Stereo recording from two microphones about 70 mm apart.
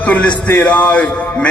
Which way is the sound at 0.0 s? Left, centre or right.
Centre.